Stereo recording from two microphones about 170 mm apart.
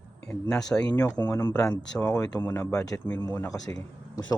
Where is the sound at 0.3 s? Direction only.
5° left (ahead or behind).